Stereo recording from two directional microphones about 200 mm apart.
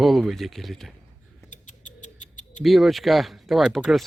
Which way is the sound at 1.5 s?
40° left (ahead or behind).